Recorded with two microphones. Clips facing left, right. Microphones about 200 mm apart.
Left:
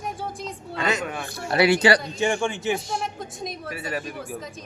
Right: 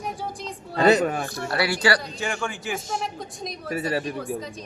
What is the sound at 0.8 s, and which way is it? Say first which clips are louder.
Speech: right 8 dB; 35° right (ahead or behind).